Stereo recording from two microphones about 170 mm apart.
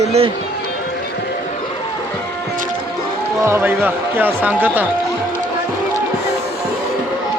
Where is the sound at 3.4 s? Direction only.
15° right (ahead or behind).